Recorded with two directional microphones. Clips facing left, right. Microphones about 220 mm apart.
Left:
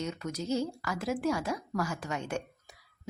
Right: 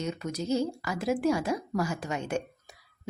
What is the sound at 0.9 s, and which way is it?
A woman's voice, 15° right (ahead or behind).